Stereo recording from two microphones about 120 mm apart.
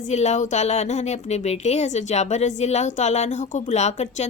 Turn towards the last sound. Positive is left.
turn(degrees=70)  # may be behind; listen again after turning